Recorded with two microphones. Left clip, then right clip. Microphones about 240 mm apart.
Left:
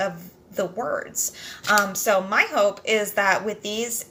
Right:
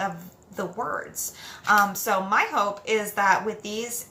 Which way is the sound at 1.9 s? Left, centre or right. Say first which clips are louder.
Left 3 dB; centre.